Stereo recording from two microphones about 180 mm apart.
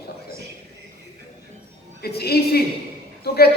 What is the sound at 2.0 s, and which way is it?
Speech, 60° left (ahead or behind).